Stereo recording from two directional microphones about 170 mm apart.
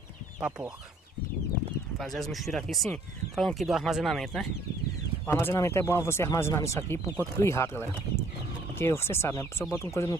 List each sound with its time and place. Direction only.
0.4 s speech: 5° right (ahead or behind)
2.0 s speech: centre (ahead or behind)
5.2 s speech: 15° left (ahead or behind)